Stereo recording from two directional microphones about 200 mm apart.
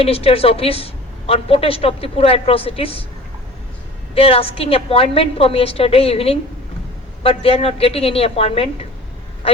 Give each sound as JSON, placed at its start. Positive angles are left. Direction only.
{"t": 0.0, "sound": "a woman's voice", "side_deg": 30}
{"t": 4.1, "sound": "a woman's voice", "side_deg": 30}